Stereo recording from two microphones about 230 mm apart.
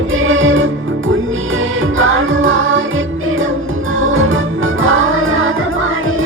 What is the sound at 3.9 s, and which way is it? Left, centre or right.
Music, right.